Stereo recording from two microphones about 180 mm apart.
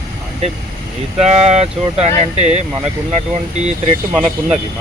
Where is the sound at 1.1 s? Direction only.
35° right (ahead or behind).